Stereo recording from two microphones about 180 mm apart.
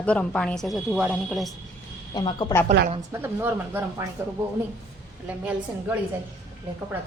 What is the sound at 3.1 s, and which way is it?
Speech, 10° right (ahead or behind).